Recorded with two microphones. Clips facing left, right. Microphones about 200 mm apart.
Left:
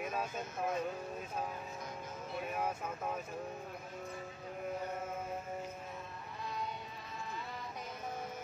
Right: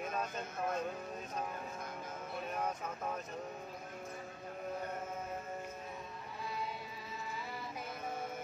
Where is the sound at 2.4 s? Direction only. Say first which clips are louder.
Left 1 dB; 5° left (ahead or behind).